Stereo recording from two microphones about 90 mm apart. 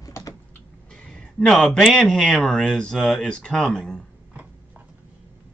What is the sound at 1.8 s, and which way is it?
Speech, centre (ahead or behind).